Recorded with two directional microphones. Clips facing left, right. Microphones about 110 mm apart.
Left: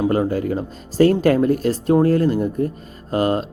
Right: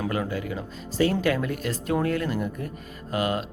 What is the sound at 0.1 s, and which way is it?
Speech, 40° left (ahead or behind).